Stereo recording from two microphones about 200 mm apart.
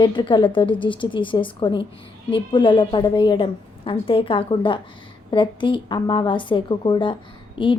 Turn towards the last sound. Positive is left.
turn(degrees=25)  # may be behind; listen again after turning